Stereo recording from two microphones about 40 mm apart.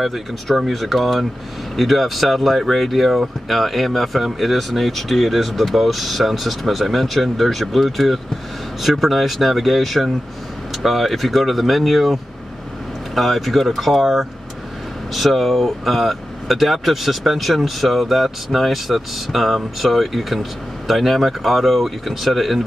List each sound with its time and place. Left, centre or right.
0.0 s speech: centre